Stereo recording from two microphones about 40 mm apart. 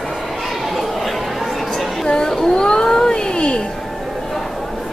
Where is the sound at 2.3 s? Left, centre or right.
Centre.